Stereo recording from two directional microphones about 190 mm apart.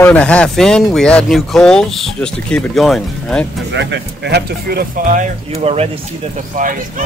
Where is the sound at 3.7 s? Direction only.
65° right (ahead or behind); by 5.9 s 30° right (ahead or behind).